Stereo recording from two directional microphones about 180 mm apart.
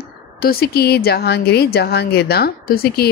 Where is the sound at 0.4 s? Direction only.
55° left (ahead or behind).